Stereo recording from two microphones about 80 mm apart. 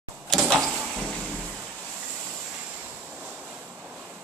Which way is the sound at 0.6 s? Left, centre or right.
Centre.